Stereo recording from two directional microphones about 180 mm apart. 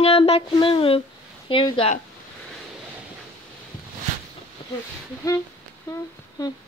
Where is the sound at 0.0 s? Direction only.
35° left (ahead or behind).